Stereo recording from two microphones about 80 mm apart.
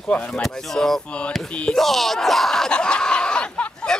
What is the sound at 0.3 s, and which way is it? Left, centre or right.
Speech, centre.